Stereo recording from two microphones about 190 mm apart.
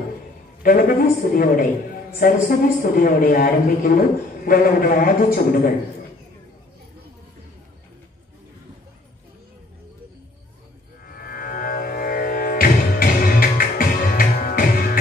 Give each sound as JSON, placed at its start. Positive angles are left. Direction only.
{"t": 0.6, "sound": "a woman's voice", "side_deg": 50}
{"t": 11.1, "sound": "music", "side_deg": 50}